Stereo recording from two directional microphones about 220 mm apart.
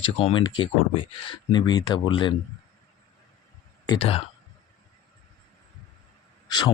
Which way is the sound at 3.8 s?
20° left (ahead or behind).